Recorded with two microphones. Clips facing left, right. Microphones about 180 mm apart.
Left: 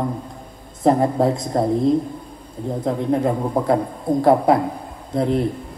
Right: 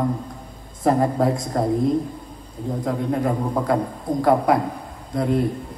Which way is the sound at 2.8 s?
25° left (ahead or behind).